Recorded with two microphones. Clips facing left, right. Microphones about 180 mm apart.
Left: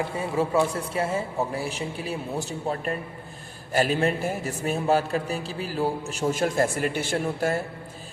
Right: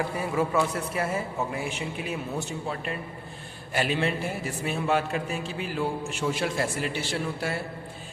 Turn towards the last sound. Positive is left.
turn(degrees=45)  # may be behind; listen again after turning